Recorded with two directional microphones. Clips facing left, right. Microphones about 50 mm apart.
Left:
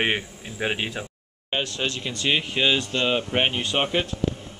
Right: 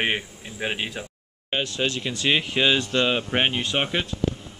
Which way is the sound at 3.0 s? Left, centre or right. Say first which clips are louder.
Even; right.